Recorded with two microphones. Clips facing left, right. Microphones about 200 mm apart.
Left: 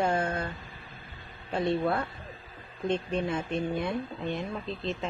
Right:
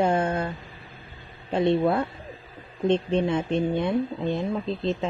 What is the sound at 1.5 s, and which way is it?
Speech, 25° right (ahead or behind).